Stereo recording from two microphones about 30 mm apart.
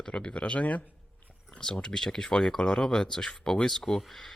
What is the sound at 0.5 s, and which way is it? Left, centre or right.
Speech, left.